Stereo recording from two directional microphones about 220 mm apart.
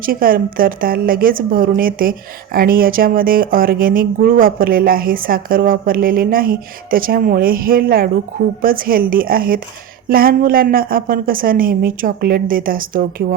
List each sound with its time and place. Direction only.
0.0 s speech: 40° right (ahead or behind)